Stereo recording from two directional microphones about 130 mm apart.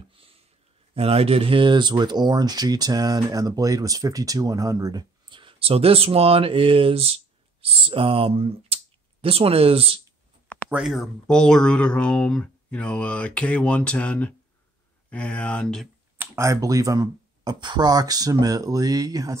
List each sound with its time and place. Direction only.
0.1 s a sound: 45° right (ahead or behind)
0.9 s speech: 50° right (ahead or behind)
10.7 s speech: centre (ahead or behind)
16.2 s speech: 25° right (ahead or behind)